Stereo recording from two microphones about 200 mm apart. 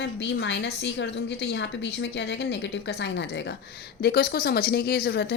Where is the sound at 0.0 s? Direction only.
60° left (ahead or behind).